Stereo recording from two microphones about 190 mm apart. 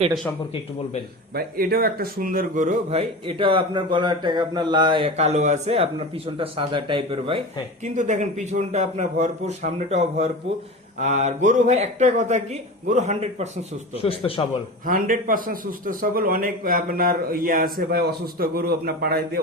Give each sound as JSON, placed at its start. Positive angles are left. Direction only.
{"t": 1.4, "sound": "a man's voice", "side_deg": -50}
{"t": 7.9, "sound": "a man's voice", "side_deg": -40}
{"t": 14.0, "sound": "a man's voice", "side_deg": 30}
{"t": 14.8, "sound": "a man's voice", "side_deg": -45}